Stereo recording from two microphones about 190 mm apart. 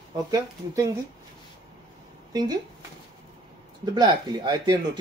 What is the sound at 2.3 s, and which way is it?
Speech, 20° right (ahead or behind).